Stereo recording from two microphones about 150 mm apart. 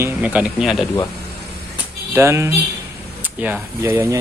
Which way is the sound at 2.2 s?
15° right (ahead or behind).